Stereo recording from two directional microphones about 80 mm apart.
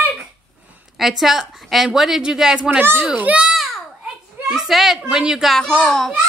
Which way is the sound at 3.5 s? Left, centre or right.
Centre.